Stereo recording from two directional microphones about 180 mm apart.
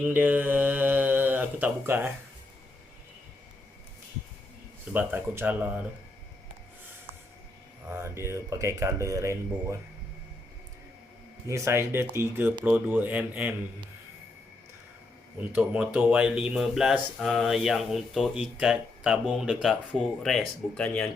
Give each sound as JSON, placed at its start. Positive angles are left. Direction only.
{"t": 0.0, "sound": "speech", "side_deg": -10}
{"t": 4.9, "sound": "speech", "side_deg": -10}
{"t": 7.9, "sound": "speech", "side_deg": -15}
{"t": 11.4, "sound": "speech", "side_deg": -15}
{"t": 15.4, "sound": "speech", "side_deg": -10}